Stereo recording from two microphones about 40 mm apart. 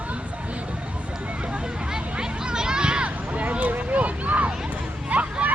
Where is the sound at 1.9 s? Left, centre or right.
Centre; by 4.5 s right.